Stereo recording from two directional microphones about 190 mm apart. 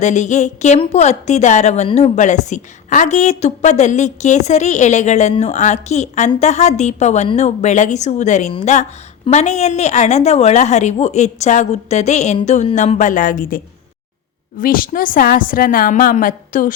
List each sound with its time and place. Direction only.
0.0 s a woman's voice: 40° left (ahead or behind)
14.6 s a woman's voice: 50° left (ahead or behind)